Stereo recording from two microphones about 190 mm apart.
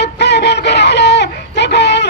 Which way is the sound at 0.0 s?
60° left (ahead or behind).